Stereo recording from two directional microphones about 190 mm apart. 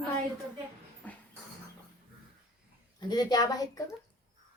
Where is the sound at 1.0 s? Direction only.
10° left (ahead or behind).